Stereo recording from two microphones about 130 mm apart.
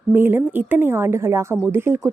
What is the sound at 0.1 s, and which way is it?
A woman's voice, 15° right (ahead or behind).